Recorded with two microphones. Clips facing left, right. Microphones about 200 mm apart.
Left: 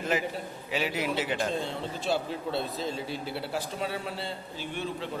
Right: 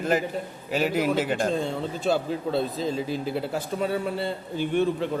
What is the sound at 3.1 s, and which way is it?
A man's voice, 50° right (ahead or behind).